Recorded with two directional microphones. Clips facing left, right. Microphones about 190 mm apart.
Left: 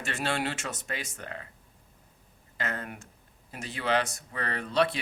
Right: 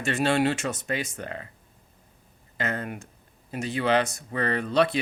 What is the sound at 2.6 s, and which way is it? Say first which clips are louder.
Speech: right 5 dB; 20° right (ahead or behind).